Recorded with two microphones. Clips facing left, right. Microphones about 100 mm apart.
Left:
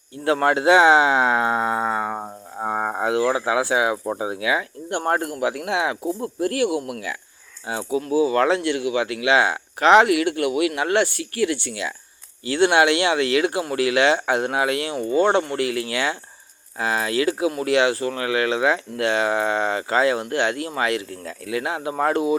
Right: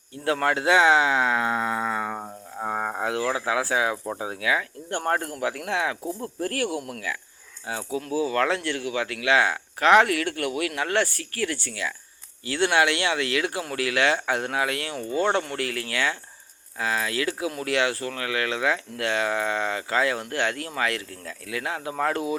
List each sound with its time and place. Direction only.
0.3 s speech: 25° left (ahead or behind)